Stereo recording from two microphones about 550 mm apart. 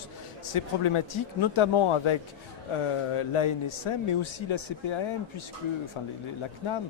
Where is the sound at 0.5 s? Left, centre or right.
Left.